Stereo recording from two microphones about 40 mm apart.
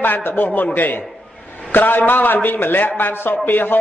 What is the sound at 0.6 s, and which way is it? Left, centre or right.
A man's voice, left.